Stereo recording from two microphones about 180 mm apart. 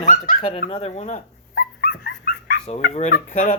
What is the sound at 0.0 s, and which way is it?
Dog, 45° left (ahead or behind).